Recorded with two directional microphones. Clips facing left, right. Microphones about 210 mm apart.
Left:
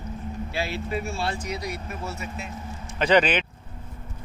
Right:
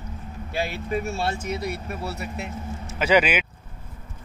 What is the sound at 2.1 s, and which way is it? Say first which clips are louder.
Speech: right 3 dB; 65° right (ahead or behind).